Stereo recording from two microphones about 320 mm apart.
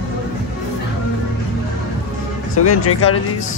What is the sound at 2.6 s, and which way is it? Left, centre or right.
Speech, left.